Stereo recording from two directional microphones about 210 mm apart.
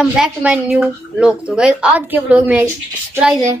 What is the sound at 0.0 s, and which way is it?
Speech, 5° right (ahead or behind).